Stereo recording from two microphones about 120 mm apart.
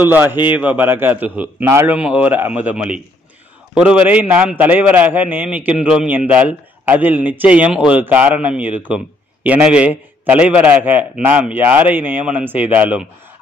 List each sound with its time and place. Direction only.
0.0 s a man's voice: 15° right (ahead or behind)